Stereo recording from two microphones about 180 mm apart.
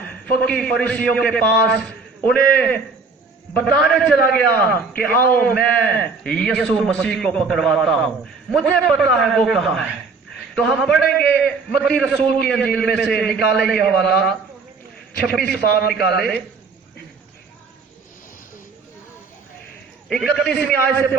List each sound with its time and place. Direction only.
0.1 s a man's voice: 5° left (ahead or behind)
15.9 s a man's voice: 60° left (ahead or behind)
20.1 s a man's voice: 5° left (ahead or behind)